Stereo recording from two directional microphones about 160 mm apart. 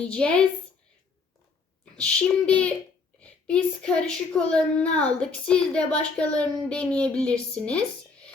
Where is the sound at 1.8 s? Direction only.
5° left (ahead or behind).